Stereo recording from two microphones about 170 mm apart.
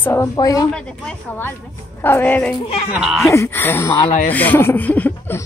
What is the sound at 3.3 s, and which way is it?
A woman's voice, 15° left (ahead or behind).